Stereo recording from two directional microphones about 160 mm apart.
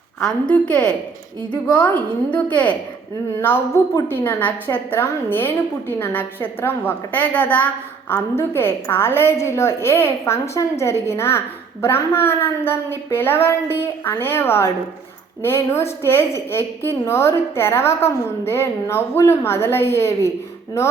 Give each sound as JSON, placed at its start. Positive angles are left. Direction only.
{"t": 0.2, "sound": "a woman's voice", "side_deg": 5}